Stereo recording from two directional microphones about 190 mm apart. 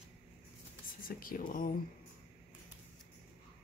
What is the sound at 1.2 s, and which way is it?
Speech, 50° left (ahead or behind).